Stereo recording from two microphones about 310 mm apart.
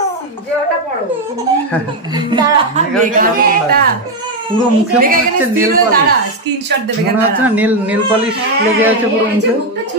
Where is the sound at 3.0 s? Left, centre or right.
Right.